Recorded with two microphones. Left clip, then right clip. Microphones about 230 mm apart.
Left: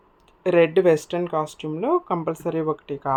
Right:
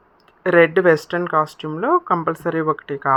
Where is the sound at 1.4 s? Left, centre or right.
Centre.